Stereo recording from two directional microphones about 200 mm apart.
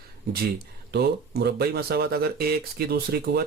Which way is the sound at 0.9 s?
55° right (ahead or behind).